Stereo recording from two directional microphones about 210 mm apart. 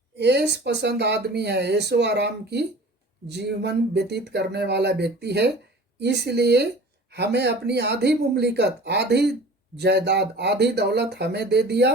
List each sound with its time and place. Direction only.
0.2 s speech: 50° right (ahead or behind)